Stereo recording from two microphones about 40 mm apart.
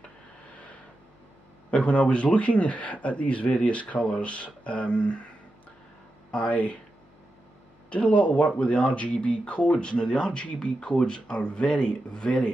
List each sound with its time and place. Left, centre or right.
1.7 s a man's voice: left
6.3 s a man's voice: left
7.9 s a man's voice: left